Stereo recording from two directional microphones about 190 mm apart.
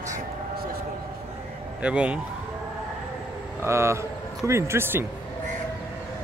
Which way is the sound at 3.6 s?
15° right (ahead or behind).